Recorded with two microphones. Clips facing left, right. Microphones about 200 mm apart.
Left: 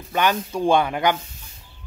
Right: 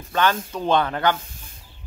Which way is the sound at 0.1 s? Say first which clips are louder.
Even; 15° left (ahead or behind).